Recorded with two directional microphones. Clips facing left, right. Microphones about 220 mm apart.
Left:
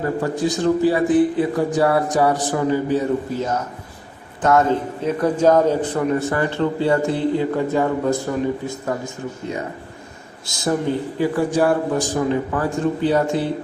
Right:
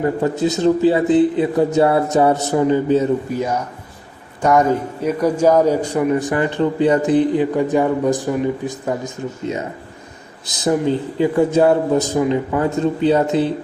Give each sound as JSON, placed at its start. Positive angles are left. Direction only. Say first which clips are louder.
{"t": 0.0, "sound": "speech", "louder": "right 3 dB", "side_deg": -20}
{"t": 5.0, "sound": "a man's voice", "louder": "right 1 dB", "side_deg": -10}